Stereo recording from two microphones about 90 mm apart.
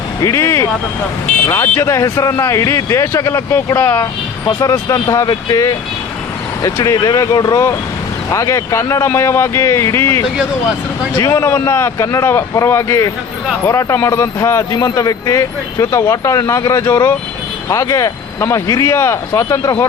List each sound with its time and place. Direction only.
0.2 s speech: 40° left (ahead or behind)
4.6 s speech: 40° left (ahead or behind)
14.7 s speech: 45° left (ahead or behind)